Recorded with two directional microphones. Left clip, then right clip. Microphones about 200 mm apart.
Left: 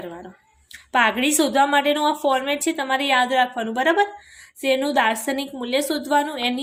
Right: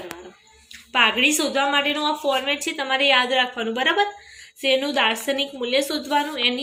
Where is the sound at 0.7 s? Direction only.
60° left (ahead or behind).